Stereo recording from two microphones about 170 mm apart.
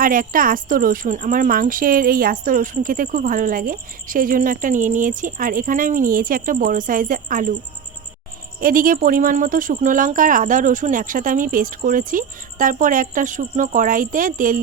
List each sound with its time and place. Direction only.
0.0 s speech: 55° right (ahead or behind)
8.6 s speech: 55° right (ahead or behind)